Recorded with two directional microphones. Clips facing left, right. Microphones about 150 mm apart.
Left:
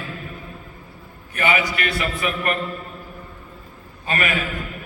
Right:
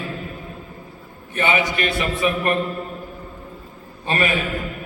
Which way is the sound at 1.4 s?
25° right (ahead or behind).